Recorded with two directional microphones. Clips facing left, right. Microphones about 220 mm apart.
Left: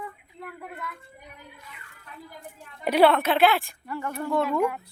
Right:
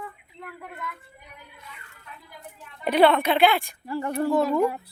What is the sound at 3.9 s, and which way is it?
Speech, 30° right (ahead or behind).